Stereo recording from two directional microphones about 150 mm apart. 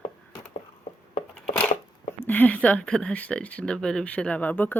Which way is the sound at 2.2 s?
10° left (ahead or behind).